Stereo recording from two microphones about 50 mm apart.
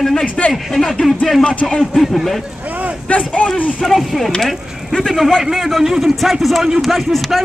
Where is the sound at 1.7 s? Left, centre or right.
Centre.